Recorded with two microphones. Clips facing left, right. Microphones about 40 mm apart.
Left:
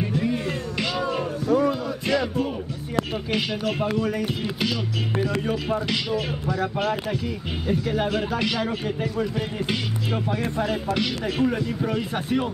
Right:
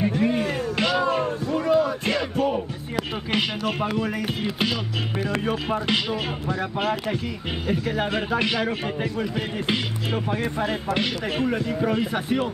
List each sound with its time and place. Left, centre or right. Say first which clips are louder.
0.2 s a sound: right 3 dB; right
1.7 s music: right 3 dB; right
3.3 s speech: even; right
6.8 s speech: even; centre
8.1 s speech: right 1 dB; right